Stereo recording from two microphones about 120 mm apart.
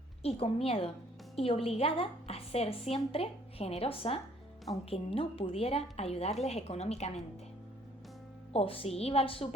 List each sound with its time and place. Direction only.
0.2 s a woman's voice: 55° left (ahead or behind)
8.5 s a woman's voice: 55° left (ahead or behind)